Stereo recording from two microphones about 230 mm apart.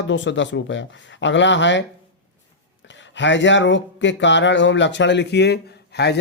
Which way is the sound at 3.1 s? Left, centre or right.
Left.